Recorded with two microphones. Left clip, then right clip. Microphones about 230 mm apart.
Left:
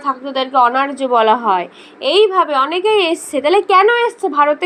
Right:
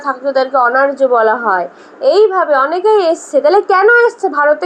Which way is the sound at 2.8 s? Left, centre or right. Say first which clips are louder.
Right 4 dB; left.